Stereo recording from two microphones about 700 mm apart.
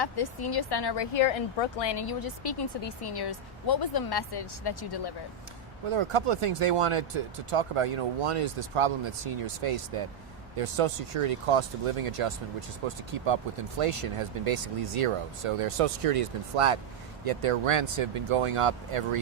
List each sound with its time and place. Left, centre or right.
0.0 s a woman's voice: left
5.9 s speech: right